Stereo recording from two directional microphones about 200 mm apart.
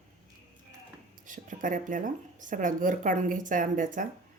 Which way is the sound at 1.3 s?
40° right (ahead or behind).